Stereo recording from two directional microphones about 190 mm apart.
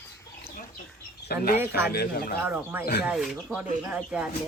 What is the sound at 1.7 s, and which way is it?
Speech, 55° left (ahead or behind).